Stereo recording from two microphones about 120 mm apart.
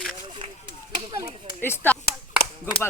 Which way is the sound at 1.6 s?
20° left (ahead or behind).